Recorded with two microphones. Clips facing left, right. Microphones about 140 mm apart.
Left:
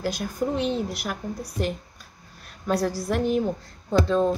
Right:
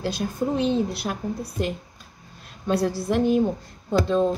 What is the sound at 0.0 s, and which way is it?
A woman's voice, 25° right (ahead or behind).